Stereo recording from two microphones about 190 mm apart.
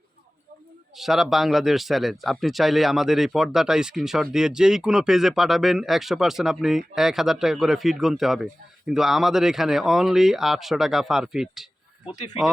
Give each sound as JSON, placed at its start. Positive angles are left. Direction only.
{"t": 0.9, "sound": "speech", "side_deg": 0}